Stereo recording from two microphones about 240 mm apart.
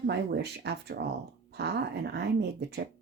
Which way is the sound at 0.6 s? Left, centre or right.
Right.